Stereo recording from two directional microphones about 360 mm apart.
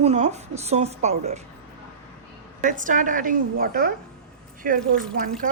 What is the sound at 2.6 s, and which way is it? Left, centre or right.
A woman's voice, right.